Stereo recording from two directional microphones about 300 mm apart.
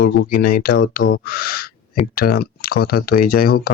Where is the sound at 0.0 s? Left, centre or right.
Left.